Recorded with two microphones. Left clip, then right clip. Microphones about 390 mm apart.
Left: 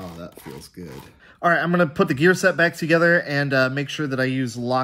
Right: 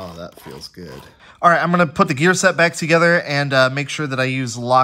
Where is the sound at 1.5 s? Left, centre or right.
Right.